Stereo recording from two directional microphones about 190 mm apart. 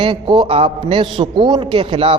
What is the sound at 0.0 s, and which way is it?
A man's voice, 25° right (ahead or behind).